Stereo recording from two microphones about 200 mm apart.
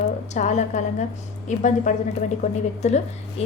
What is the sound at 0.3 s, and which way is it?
A woman's voice, 35° left (ahead or behind).